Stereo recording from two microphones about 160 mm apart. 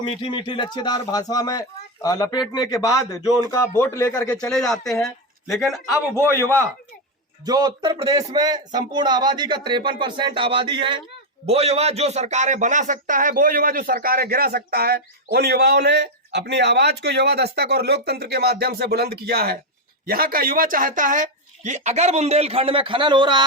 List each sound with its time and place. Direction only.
0.0 s speech: 30° left (ahead or behind)
4.4 s speech: 5° left (ahead or behind)
7.4 s speech: 25° right (ahead or behind)
8.4 s speech: 25° right (ahead or behind); by 19.5 s 80° right
20.1 s speech: 65° right (ahead or behind); by 23.4 s 30° right (ahead or behind)